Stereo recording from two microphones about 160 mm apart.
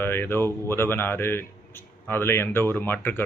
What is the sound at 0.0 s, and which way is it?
A man's voice, 15° left (ahead or behind).